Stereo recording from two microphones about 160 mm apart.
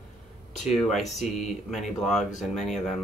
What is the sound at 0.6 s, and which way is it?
Speech, centre (ahead or behind).